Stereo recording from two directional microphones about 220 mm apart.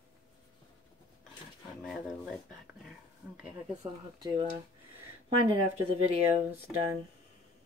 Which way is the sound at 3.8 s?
20° right (ahead or behind).